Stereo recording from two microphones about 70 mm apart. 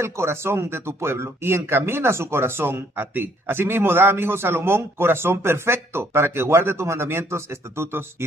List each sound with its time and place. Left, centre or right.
0.0 s a man's voice: right